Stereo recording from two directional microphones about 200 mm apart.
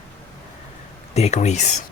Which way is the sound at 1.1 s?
35° left (ahead or behind).